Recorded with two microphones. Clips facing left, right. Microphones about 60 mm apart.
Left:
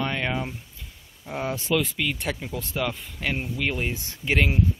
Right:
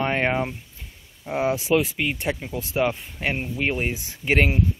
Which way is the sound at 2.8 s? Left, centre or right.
Right.